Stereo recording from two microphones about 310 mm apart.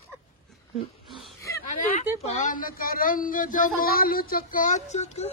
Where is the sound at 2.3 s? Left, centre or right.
Left.